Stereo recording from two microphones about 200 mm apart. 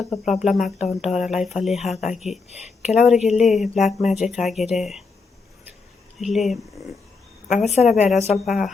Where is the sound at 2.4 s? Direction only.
35° left (ahead or behind).